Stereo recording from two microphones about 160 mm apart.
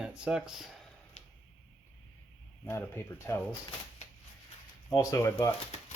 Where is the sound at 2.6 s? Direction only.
15° left (ahead or behind).